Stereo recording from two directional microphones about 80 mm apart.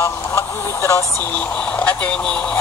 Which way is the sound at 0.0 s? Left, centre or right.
Left.